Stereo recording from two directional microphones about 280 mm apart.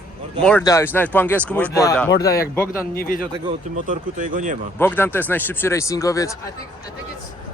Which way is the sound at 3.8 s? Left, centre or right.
Right.